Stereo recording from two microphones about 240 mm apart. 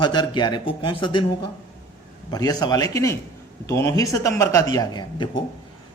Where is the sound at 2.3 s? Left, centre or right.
Centre.